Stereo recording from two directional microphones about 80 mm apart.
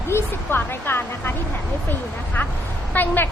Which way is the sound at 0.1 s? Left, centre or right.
Left.